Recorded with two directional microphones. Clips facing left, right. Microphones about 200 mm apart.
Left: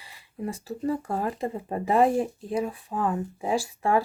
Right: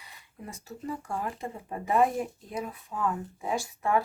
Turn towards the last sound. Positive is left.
turn(degrees=30)  # may be behind; listen again after turning